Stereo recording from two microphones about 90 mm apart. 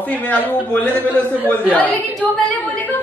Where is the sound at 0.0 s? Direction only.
15° left (ahead or behind).